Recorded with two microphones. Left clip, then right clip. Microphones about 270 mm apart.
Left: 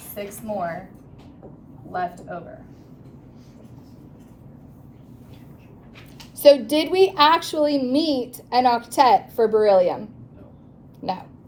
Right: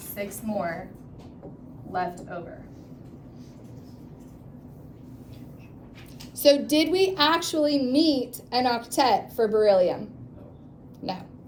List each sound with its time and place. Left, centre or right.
0.1 s a woman's voice: centre
1.9 s a woman's voice: centre
6.4 s a woman's voice: left